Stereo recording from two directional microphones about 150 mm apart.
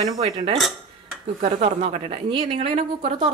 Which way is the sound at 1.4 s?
45° right (ahead or behind).